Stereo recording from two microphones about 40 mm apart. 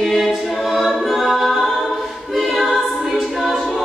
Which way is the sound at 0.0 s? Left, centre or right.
Centre.